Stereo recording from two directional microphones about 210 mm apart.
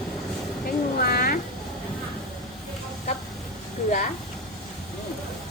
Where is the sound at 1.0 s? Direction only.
45° left (ahead or behind).